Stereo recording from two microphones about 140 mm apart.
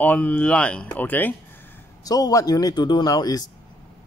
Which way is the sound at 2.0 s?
25° left (ahead or behind).